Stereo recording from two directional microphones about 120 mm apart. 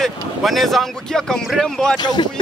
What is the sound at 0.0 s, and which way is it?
Speech, centre (ahead or behind).